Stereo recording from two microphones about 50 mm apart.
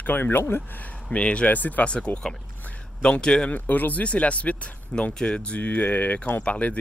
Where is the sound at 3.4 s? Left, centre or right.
Left.